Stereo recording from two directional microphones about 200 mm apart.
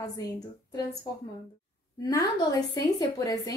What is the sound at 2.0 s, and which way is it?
A woman's voice, 20° left (ahead or behind).